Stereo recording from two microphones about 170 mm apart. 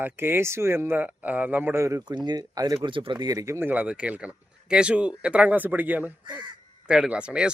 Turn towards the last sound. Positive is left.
turn(degrees=-5)  # may be behind; listen again after turning